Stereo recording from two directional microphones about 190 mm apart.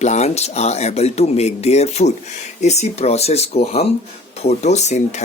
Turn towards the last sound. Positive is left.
turn(degrees=35)  # may be behind; listen again after turning